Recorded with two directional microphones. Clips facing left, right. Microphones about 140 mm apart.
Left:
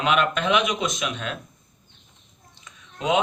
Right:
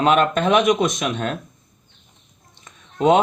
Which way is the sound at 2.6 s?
50° right (ahead or behind).